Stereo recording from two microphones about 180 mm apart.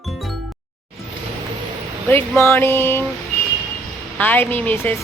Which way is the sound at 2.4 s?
10° left (ahead or behind).